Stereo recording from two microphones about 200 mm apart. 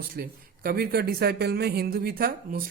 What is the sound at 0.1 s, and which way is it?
A man's voice, 50° right (ahead or behind).